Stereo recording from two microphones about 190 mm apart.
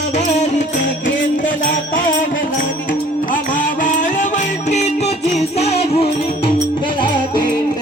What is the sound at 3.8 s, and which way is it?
Music, 40° left (ahead or behind).